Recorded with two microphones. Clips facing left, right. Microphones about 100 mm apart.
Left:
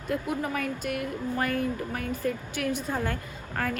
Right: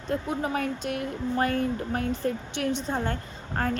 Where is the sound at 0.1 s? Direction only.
40° right (ahead or behind).